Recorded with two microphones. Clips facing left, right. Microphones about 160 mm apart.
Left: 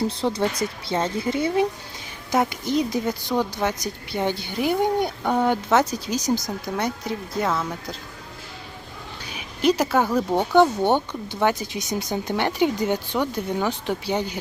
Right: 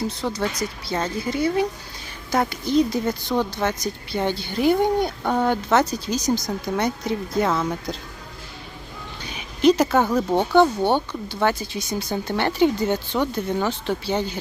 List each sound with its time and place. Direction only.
0.1 s a woman's voice: 30° left (ahead or behind); by 7.7 s centre (ahead or behind)
9.3 s a woman's voice: 10° left (ahead or behind)